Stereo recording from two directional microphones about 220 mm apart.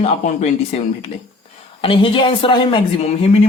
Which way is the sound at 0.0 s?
30° left (ahead or behind).